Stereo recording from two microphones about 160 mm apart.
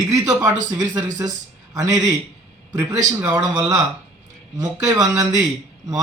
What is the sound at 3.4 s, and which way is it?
A man's voice, 25° right (ahead or behind).